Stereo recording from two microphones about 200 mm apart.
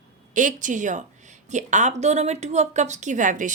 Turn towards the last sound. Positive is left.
turn(degrees=-40)  # may be behind; listen again after turning